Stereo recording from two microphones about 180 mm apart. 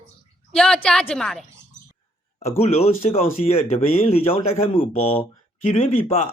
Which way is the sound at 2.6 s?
35° left (ahead or behind).